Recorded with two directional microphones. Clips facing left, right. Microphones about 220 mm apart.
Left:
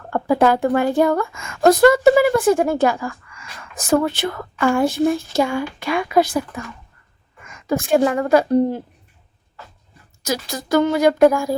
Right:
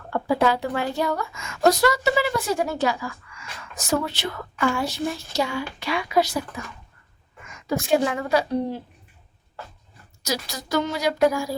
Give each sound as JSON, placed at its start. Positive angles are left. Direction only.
{"t": 0.1, "sound": "a woman's voice", "side_deg": 50}
{"t": 10.2, "sound": "a woman's voice", "side_deg": 50}